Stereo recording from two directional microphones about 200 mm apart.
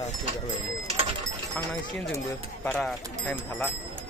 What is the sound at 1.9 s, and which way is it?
Speech, 10° left (ahead or behind).